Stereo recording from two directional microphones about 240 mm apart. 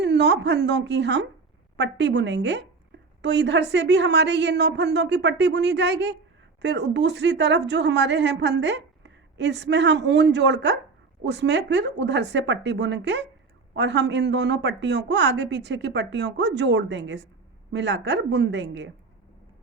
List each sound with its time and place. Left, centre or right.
0.0 s speech: right